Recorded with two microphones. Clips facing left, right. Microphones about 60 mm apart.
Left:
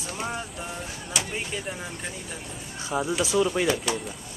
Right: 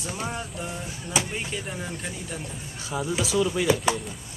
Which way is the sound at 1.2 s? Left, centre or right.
Centre.